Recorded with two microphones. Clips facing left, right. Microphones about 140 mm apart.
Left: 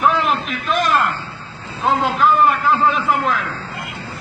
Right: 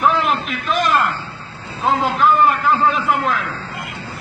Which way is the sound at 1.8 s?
Centre (ahead or behind).